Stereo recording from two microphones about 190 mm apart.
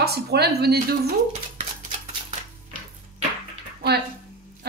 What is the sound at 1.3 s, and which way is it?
Dog, 35° right (ahead or behind).